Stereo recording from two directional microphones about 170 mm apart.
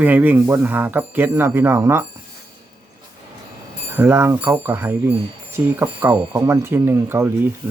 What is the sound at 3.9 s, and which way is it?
Speech, 15° right (ahead or behind).